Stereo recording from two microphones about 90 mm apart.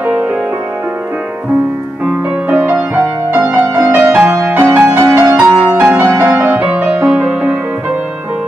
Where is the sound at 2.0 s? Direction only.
15° right (ahead or behind).